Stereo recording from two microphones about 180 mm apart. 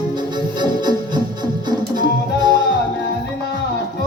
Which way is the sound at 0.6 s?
25° right (ahead or behind).